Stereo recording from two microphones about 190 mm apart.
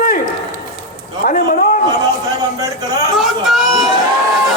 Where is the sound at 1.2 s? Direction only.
45° left (ahead or behind).